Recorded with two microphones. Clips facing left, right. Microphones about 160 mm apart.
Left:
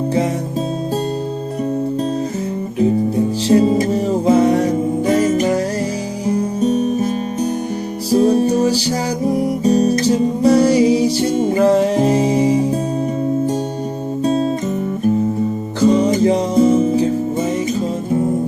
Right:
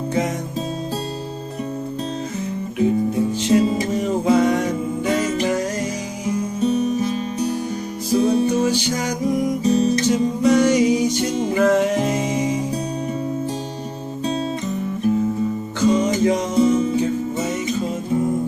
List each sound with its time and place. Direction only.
3.5 s music: 45° left (ahead or behind)
14.3 s music: 45° left (ahead or behind)
15.8 s music: 35° left (ahead or behind)